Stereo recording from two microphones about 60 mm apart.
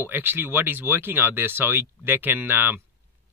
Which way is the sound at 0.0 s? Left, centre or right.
Right.